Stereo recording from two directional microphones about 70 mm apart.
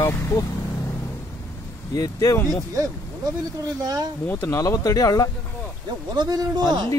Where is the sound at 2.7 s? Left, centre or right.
Right.